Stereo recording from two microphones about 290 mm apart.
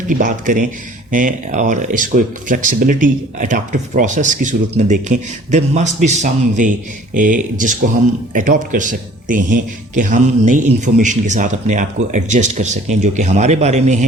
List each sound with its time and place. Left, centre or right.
0.1 s speech: right